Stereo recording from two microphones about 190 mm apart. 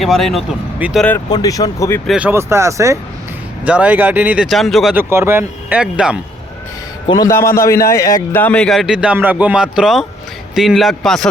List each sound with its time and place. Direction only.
0.0 s speech: centre (ahead or behind)
1.3 s speech: 20° left (ahead or behind)
2.0 s speech: 5° right (ahead or behind)
5.1 s speech: 15° right (ahead or behind)
7.1 s a man's voice: 20° left (ahead or behind); by 11.3 s centre (ahead or behind)